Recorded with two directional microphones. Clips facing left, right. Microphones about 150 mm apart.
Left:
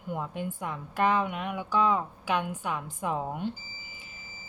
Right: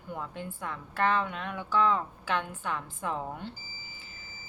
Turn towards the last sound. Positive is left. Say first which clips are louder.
# left 4 dB
turn(degrees=15)  # may be behind; listen again after turning